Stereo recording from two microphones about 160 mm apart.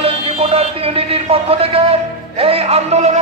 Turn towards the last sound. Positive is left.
turn(degrees=-40)  # may be behind; listen again after turning